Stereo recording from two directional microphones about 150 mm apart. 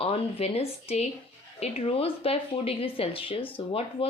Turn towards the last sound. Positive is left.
turn(degrees=35)  # may be behind; listen again after turning